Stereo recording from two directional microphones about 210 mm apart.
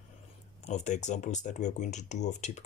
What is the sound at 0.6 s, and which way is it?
Speech, 35° left (ahead or behind).